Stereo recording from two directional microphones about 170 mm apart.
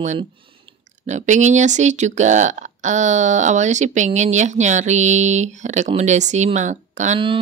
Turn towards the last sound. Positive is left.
turn(degrees=-45)  # may be behind; listen again after turning